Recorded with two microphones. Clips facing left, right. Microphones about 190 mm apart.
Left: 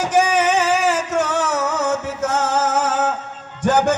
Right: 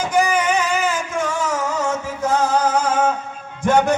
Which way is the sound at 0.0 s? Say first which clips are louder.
Left 2 dB; 70° left (ahead or behind).